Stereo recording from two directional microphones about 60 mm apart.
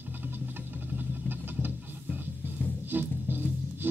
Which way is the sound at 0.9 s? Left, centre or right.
Right.